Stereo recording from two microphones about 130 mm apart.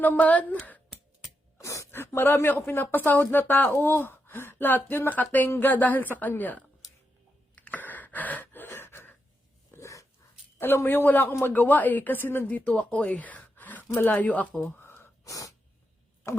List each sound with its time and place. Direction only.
0.0 s a woman's voice: 10° left (ahead or behind)
1.5 s a woman's voice: 25° left (ahead or behind)
7.5 s gasp: 10° left (ahead or behind)
9.7 s dog: 25° left (ahead or behind)
10.6 s a woman's voice: 15° left (ahead or behind)
14.8 s wheeze: 15° left (ahead or behind)